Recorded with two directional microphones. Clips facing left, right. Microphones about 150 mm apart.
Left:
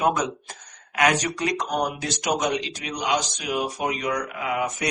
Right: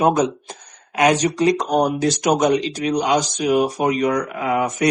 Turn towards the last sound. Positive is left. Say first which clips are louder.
# right 7 dB
turn(degrees=-45)  # may be behind; listen again after turning